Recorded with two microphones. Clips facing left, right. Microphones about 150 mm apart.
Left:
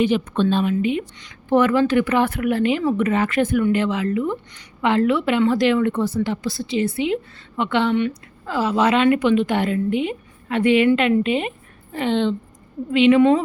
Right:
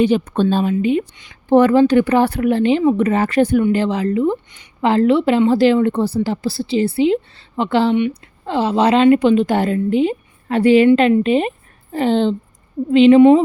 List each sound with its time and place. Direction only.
0.0 s a woman's voice: 35° right (ahead or behind)